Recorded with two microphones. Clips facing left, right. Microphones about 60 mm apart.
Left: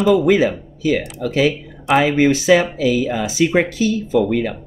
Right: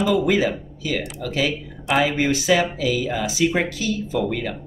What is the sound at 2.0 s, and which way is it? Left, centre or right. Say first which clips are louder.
Speech: left 5 dB; left.